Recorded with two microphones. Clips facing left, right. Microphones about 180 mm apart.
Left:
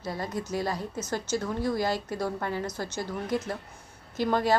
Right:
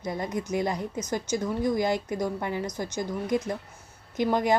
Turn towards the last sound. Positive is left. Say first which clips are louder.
# right 1 dB
turn(degrees=-15)  # may be behind; listen again after turning